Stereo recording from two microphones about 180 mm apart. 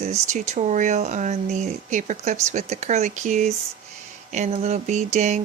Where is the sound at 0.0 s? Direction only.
40° right (ahead or behind).